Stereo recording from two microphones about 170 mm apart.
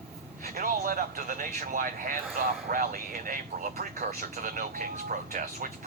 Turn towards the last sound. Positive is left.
turn(degrees=-55)  # may be behind; listen again after turning